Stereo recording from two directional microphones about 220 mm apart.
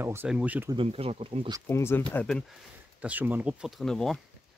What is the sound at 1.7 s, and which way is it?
Speech, 10° left (ahead or behind).